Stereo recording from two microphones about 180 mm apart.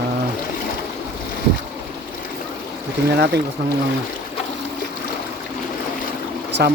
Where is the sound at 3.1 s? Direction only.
70° right (ahead or behind).